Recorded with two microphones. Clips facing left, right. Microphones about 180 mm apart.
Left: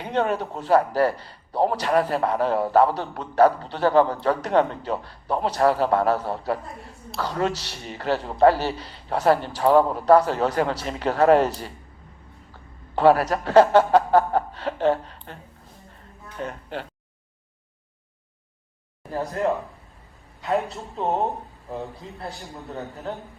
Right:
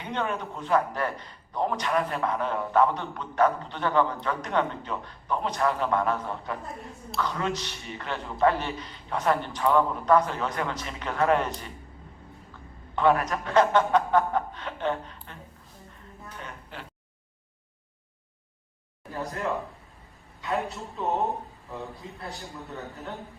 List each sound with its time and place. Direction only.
0.0 s a man's voice: 35° left (ahead or behind)
13.0 s a man's voice: 35° left (ahead or behind)
16.4 s a man's voice: 35° left (ahead or behind)
20.7 s a man's voice: 35° left (ahead or behind)